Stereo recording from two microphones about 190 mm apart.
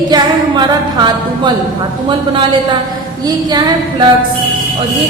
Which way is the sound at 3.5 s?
20° right (ahead or behind).